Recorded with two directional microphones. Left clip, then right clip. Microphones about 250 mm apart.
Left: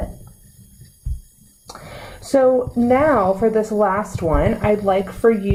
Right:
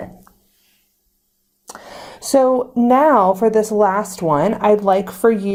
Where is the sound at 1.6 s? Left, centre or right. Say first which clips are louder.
Right 1 dB; right.